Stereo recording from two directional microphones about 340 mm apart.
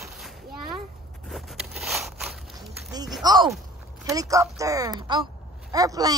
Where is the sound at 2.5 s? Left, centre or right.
Centre.